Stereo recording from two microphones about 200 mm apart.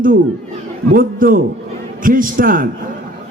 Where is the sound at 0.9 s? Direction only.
45° right (ahead or behind).